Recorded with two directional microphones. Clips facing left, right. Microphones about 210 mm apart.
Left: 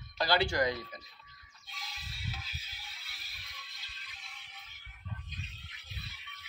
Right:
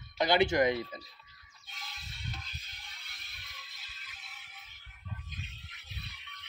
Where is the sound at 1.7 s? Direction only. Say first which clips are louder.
Left 1 dB; centre (ahead or behind).